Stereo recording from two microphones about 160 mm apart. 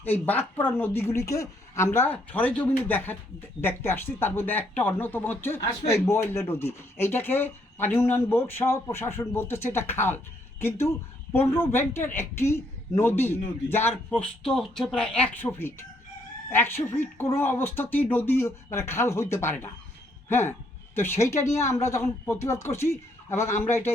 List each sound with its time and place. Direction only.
0.0 s speech: 10° left (ahead or behind)
14.2 s speech: 5° left (ahead or behind)
20.9 s speech: 15° left (ahead or behind)